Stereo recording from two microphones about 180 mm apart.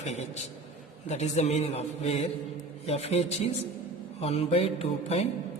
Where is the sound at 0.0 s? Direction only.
40° left (ahead or behind).